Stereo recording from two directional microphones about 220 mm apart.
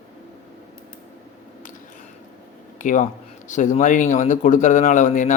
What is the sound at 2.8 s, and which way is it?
Speech, 35° left (ahead or behind).